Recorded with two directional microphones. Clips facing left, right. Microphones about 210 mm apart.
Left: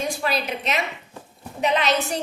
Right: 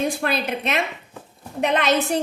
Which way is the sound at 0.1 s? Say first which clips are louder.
Right 2 dB; 55° right (ahead or behind).